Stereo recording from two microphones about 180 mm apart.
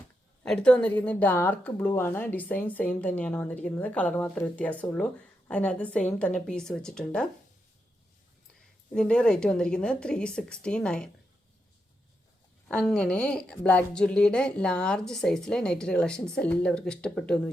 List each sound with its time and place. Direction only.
0.4 s a woman's voice: 5° left (ahead or behind)
8.9 s a woman's voice: 5° left (ahead or behind)
12.6 s a woman's voice: 5° left (ahead or behind)